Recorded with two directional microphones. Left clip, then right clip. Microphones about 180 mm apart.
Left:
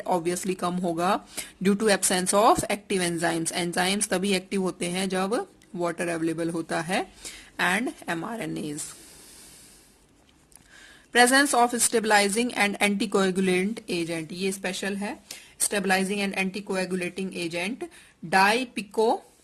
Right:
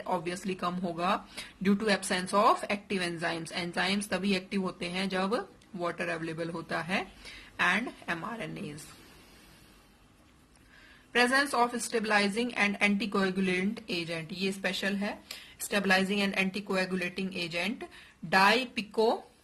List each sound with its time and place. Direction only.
0.0 s speech: 50° left (ahead or behind)
11.1 s speech: 55° left (ahead or behind)